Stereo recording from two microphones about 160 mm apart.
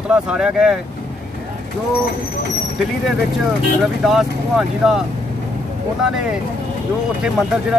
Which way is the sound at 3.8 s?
Centre (ahead or behind).